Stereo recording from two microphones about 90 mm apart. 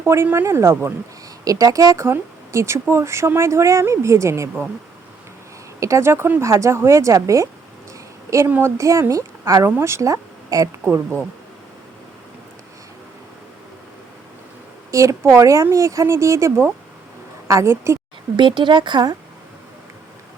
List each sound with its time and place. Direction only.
0.0 s speech: 25° right (ahead or behind)
1.5 s speech: 40° right (ahead or behind)
2.0 s speech: 30° right (ahead or behind)
5.8 s speech: 30° right (ahead or behind)
8.4 s speech: 20° right (ahead or behind)
8.8 s speech: 35° right (ahead or behind)
9.6 s speech: 30° right (ahead or behind)
10.8 s speech: 25° right (ahead or behind)
14.8 s speech: 35° right (ahead or behind)
18.3 s speech: 60° right (ahead or behind)